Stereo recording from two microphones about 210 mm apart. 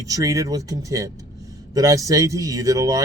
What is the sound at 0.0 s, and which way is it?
Speech, 15° right (ahead or behind).